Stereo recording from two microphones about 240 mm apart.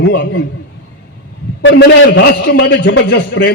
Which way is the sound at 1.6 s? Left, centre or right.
Left.